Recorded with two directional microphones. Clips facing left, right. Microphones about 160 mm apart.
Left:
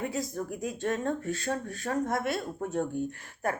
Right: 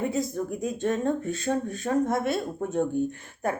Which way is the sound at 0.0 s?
25° right (ahead or behind).